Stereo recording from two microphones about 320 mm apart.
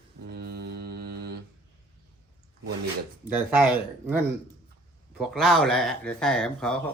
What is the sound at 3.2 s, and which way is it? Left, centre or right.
Speech, centre.